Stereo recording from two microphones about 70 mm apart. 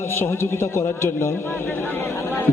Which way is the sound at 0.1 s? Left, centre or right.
Left.